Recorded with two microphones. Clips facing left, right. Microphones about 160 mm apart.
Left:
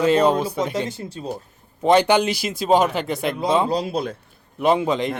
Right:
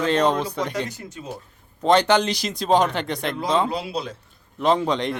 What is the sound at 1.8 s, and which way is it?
Speech, 10° left (ahead or behind).